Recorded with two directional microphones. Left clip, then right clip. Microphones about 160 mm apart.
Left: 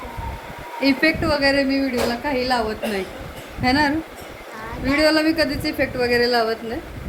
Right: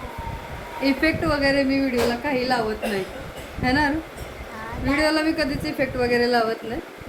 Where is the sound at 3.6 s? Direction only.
20° left (ahead or behind).